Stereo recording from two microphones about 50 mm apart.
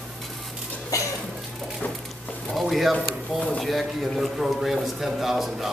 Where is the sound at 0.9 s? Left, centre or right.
Left.